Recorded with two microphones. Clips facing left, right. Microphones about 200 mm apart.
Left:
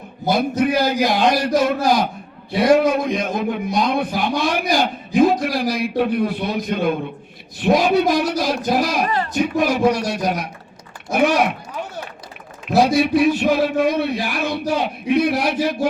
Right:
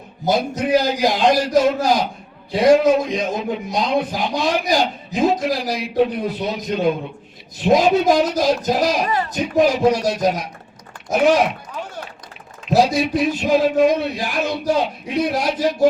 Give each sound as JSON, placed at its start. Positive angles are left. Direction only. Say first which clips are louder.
{"t": 0.3, "sound": "a man's voice", "louder": "even", "side_deg": 55}
{"t": 12.7, "sound": "a man's voice", "louder": "left 1 dB", "side_deg": 55}